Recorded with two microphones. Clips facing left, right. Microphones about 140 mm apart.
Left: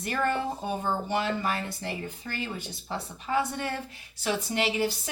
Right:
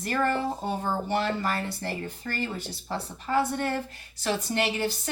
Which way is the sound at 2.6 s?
5° left (ahead or behind).